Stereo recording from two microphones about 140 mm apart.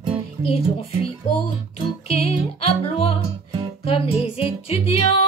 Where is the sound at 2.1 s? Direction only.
45° left (ahead or behind).